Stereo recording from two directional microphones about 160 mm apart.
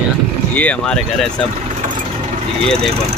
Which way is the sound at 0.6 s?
5° left (ahead or behind).